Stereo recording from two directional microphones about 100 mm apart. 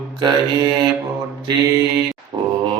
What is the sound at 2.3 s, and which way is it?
Grunt, 40° right (ahead or behind).